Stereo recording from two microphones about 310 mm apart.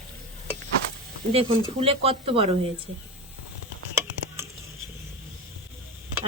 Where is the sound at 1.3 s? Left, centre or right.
Centre.